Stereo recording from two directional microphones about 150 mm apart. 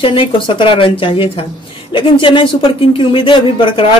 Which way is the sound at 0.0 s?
35° left (ahead or behind).